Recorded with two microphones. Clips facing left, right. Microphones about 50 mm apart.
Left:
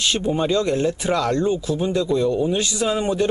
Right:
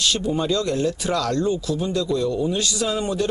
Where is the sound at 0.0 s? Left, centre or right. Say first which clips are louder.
Left 1 dB; left.